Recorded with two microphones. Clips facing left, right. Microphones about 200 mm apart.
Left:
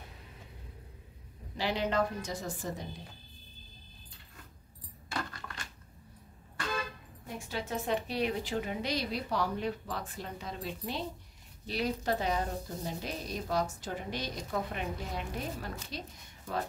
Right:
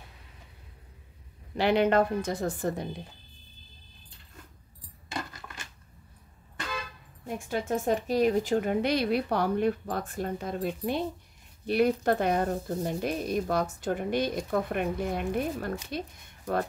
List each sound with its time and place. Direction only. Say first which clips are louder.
1.6 s speech: right 8 dB; 60° right (ahead or behind)
7.3 s a woman's voice: right 7 dB; 50° right (ahead or behind)